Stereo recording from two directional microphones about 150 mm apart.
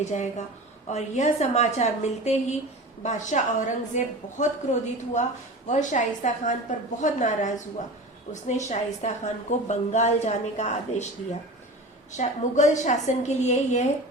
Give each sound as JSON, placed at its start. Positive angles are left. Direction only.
{"t": 0.0, "sound": "a woman's voice", "side_deg": 50}
{"t": 12.1, "sound": "a woman's voice", "side_deg": 50}